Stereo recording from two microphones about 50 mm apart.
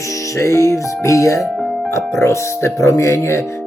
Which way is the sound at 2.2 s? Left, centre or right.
Left.